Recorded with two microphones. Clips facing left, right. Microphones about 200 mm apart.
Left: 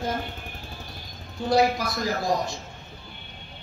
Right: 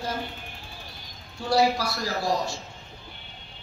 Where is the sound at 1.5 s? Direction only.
20° left (ahead or behind).